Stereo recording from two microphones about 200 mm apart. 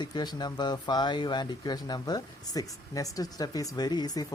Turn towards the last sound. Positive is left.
turn(degrees=20)  # may be behind; listen again after turning